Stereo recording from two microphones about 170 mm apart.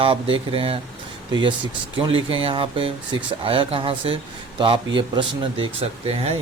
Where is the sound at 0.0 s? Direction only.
30° right (ahead or behind).